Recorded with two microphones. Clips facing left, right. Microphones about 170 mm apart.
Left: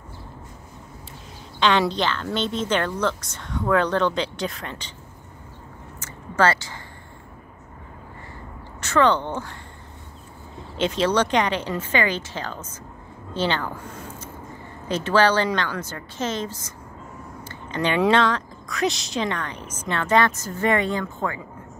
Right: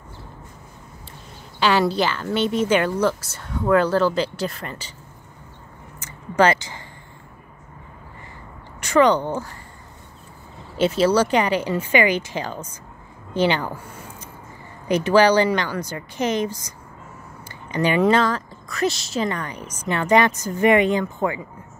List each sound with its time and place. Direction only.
1.6 s speech: 5° right (ahead or behind)
5.9 s a sound: 15° right (ahead or behind)
8.8 s speech: 15° right (ahead or behind)
10.8 s speech: 5° right (ahead or behind)